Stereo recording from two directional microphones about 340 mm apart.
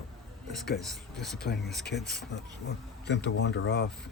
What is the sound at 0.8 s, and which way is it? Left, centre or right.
Speech, centre.